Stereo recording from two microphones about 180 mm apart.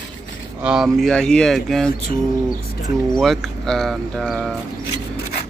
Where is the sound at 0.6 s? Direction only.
5° right (ahead or behind).